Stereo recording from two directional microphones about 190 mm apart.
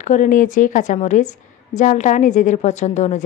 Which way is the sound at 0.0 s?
40° left (ahead or behind).